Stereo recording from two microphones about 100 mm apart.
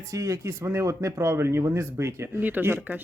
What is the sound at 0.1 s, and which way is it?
Speech, 35° right (ahead or behind).